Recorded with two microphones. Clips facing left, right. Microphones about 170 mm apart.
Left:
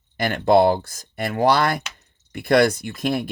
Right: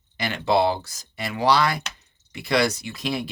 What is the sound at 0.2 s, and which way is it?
Speech, 50° left (ahead or behind).